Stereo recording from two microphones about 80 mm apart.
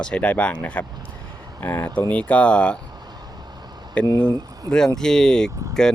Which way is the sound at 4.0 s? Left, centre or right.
Centre.